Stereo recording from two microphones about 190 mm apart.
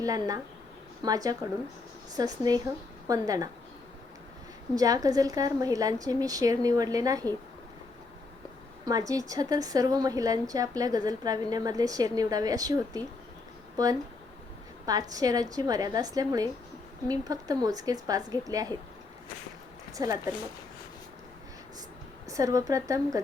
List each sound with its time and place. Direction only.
0.0 s a woman's voice: 20° right (ahead or behind)
4.7 s a woman's voice: 20° right (ahead or behind)
8.8 s a woman's voice: 20° right (ahead or behind)
14.8 s a woman's voice: 20° right (ahead or behind)
20.0 s a woman's voice: 20° right (ahead or behind)
22.3 s a woman's voice: 15° right (ahead or behind)